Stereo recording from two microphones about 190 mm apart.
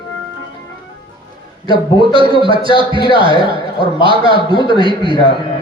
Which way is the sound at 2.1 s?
25° right (ahead or behind).